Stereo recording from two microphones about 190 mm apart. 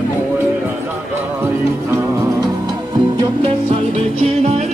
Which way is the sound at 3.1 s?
30° right (ahead or behind).